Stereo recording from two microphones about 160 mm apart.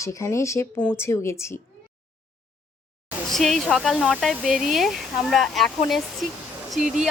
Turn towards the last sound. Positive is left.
turn(degrees=-5)  # may be behind; listen again after turning